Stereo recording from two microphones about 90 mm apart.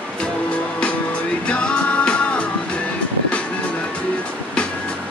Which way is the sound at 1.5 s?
10° left (ahead or behind).